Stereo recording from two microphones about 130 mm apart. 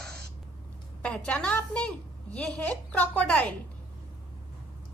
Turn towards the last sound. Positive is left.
turn(degrees=10)  # may be behind; listen again after turning